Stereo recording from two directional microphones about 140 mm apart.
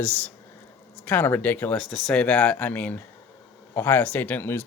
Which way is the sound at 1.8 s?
Centre (ahead or behind).